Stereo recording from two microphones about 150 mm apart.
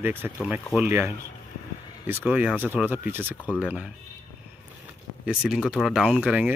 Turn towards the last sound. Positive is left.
turn(degrees=-5)  # may be behind; listen again after turning